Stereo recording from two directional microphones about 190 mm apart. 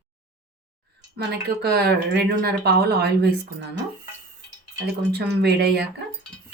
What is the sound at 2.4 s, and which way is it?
Speech, 55° right (ahead or behind).